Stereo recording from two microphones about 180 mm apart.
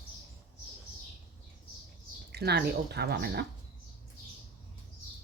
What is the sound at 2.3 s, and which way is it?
Speech, 65° right (ahead or behind).